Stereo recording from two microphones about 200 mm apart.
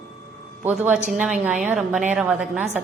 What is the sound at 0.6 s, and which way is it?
A woman's voice, 10° right (ahead or behind).